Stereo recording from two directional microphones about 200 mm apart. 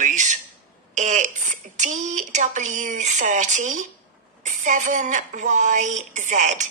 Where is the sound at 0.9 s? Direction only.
35° right (ahead or behind).